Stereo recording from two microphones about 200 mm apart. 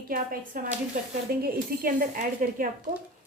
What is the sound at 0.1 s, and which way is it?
A woman's voice, 45° right (ahead or behind).